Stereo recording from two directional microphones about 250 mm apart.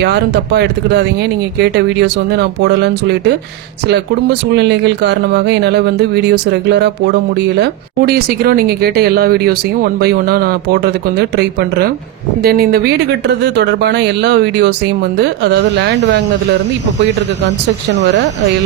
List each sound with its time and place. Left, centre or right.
0.0 s speech: right